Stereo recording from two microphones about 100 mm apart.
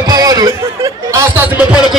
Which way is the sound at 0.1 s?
40° right (ahead or behind).